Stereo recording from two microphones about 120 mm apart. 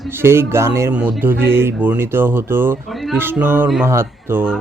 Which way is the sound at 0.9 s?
10° right (ahead or behind).